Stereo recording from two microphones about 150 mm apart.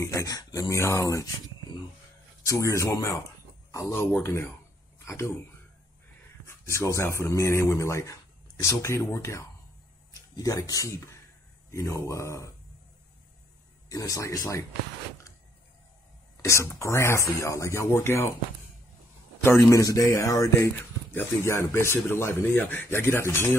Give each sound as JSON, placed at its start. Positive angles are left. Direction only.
{"t": 0.0, "sound": "speech", "side_deg": 20}
{"t": 2.4, "sound": "speech", "side_deg": 20}
{"t": 6.4, "sound": "speech", "side_deg": 20}
{"t": 13.8, "sound": "speech", "side_deg": 25}
{"t": 16.4, "sound": "speech", "side_deg": 20}
{"t": 19.4, "sound": "speech", "side_deg": 20}